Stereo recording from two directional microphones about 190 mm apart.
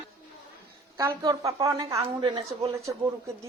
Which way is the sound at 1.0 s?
15° right (ahead or behind).